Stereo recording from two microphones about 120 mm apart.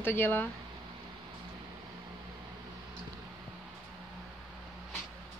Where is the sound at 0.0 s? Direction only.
20° left (ahead or behind).